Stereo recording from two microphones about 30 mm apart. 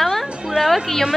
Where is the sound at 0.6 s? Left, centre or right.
Right.